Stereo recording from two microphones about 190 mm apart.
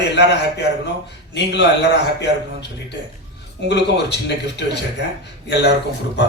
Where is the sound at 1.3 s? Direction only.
65° left (ahead or behind).